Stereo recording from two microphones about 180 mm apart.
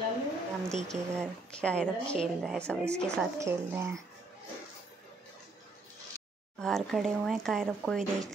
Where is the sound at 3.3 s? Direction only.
15° right (ahead or behind).